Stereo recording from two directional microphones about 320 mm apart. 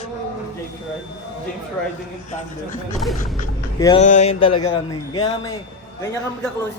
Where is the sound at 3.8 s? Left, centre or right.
Centre.